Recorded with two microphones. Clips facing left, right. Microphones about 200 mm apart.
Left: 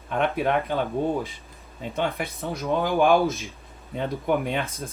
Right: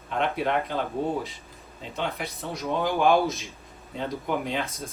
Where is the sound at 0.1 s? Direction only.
55° left (ahead or behind).